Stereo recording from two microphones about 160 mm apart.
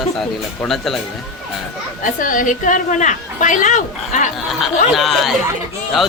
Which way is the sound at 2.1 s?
55° left (ahead or behind).